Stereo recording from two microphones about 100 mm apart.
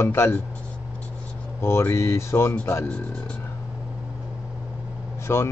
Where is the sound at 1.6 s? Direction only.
25° left (ahead or behind).